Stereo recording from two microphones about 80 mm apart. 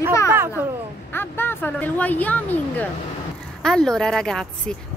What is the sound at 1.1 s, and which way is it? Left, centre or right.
Speech, left.